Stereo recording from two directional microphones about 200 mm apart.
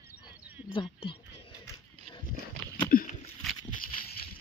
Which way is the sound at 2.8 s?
45° left (ahead or behind).